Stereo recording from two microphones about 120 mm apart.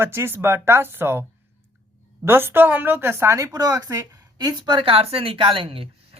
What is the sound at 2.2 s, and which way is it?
A woman's voice, 20° right (ahead or behind).